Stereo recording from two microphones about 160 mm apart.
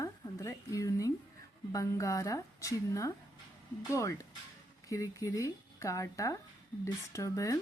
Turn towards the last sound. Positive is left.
turn(degrees=20)  # may be behind; listen again after turning